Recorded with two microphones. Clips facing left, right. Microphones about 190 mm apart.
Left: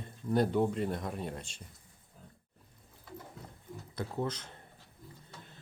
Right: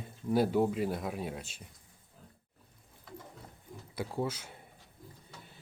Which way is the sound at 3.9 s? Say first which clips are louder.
Right 1 dB; 10° right (ahead or behind).